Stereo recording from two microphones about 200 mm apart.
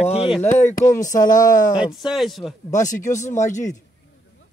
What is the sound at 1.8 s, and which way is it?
Speech, centre (ahead or behind).